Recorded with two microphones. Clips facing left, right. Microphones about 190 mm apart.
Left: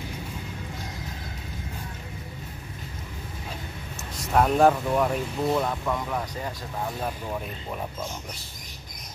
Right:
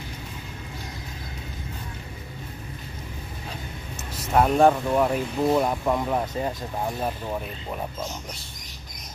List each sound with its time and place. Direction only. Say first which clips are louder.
4.2 s speech: right 1 dB; 5° right (ahead or behind)
5.5 s speech: right 4 dB; 20° right (ahead or behind)